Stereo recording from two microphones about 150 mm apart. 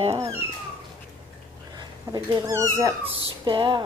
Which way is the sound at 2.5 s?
20° right (ahead or behind).